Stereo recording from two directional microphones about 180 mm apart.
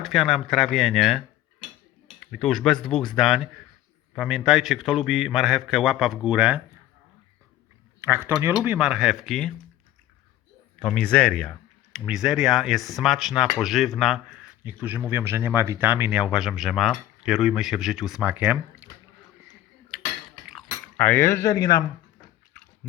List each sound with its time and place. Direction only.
0.0 s speech: centre (ahead or behind)
2.2 s speech: centre (ahead or behind)
8.0 s speech: 15° right (ahead or behind); by 9.5 s 5° left (ahead or behind)
10.8 s speech: 5° left (ahead or behind)
21.0 s speech: 10° left (ahead or behind)